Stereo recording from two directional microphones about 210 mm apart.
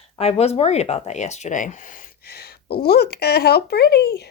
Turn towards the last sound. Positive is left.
turn(degrees=50)  # may be behind; listen again after turning